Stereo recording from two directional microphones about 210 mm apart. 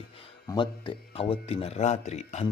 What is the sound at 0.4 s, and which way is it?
Speech, 20° left (ahead or behind).